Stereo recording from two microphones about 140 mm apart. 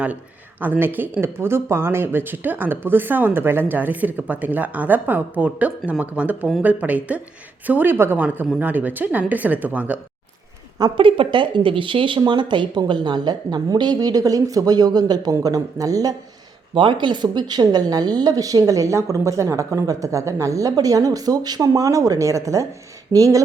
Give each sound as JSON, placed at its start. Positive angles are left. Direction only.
{"t": 0.6, "sound": "speech", "side_deg": -15}
{"t": 10.8, "sound": "a woman's voice", "side_deg": -35}